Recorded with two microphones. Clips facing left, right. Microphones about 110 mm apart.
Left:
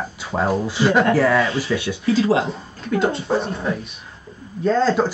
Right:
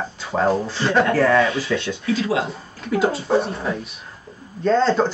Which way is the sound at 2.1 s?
30° left (ahead or behind).